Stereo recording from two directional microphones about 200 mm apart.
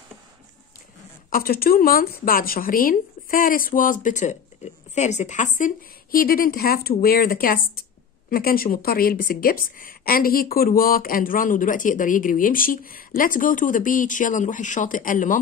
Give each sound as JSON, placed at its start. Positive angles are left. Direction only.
{"t": 1.3, "sound": "a woman's voice", "side_deg": 45}